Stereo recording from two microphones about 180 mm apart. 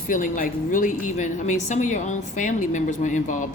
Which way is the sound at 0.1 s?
50° left (ahead or behind).